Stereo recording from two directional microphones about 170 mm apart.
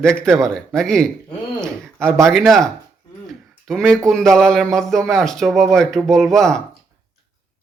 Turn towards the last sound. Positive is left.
turn(degrees=5)  # may be behind; listen again after turning